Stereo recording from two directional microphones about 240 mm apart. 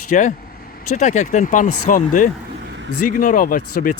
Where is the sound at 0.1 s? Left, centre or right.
Left.